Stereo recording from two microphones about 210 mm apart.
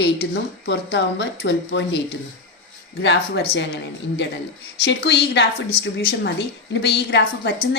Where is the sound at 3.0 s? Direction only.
55° left (ahead or behind).